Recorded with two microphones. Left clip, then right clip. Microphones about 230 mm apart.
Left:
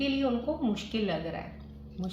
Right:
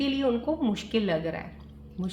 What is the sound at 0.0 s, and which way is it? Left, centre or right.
A woman's voice, right.